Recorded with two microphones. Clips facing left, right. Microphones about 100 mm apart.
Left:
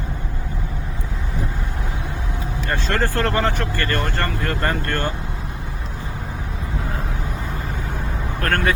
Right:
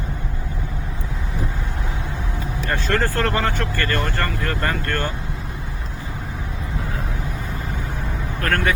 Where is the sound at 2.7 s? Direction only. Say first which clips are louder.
Even; 20° left (ahead or behind).